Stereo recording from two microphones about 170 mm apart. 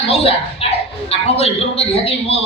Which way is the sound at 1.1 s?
35° left (ahead or behind).